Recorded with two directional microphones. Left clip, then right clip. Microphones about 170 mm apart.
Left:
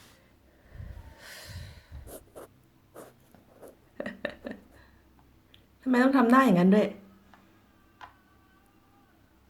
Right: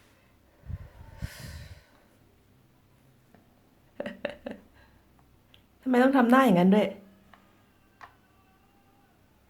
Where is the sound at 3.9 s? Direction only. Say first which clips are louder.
Right 1 dB; 5° right (ahead or behind).